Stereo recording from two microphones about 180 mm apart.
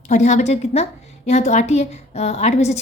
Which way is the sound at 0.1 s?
40° left (ahead or behind).